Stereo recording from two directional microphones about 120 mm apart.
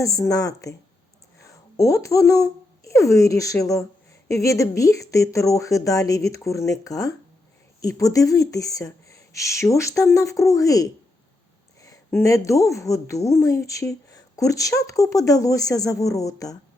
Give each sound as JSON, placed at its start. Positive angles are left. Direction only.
{"t": 0.0, "sound": "speech", "side_deg": 30}